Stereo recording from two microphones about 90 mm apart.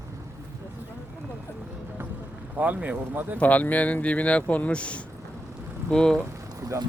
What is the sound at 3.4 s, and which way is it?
Speech, 15° left (ahead or behind).